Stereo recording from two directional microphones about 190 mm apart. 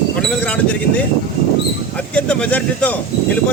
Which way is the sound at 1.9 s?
5° left (ahead or behind).